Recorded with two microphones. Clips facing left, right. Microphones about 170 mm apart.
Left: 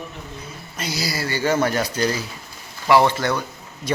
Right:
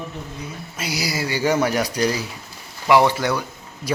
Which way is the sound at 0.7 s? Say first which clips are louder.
Even; 10° right (ahead or behind).